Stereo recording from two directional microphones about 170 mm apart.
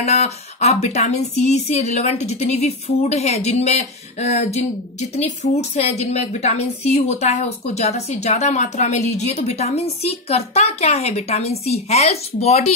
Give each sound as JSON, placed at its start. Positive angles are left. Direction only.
{"t": 0.0, "sound": "a woman's voice", "side_deg": 40}